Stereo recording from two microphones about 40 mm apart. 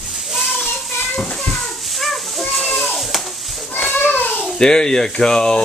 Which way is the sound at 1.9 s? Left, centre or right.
Centre.